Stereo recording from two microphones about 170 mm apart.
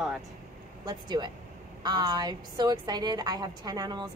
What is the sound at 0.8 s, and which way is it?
A woman's voice, 25° right (ahead or behind).